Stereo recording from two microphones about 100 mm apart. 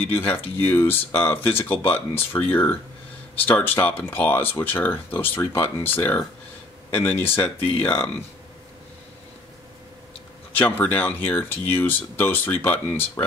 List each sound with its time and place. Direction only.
0.0 s speech: 20° left (ahead or behind)
10.5 s speech: 15° left (ahead or behind)